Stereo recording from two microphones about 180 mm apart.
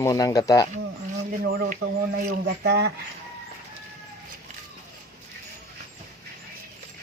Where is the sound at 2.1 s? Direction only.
65° right (ahead or behind).